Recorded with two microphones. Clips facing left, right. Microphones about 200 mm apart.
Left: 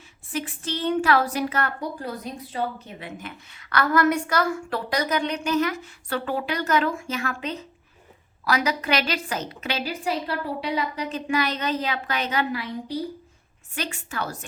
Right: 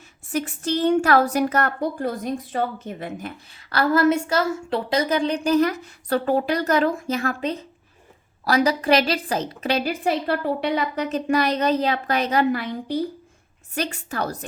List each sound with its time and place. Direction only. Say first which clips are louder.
0.3 s a woman's voice: right 5 dB; 45° right (ahead or behind)
9.8 s a woman's voice: right 5 dB; 55° right (ahead or behind); by 12.5 s 35° right (ahead or behind)
13.7 s a woman's voice: right 4 dB; 40° right (ahead or behind)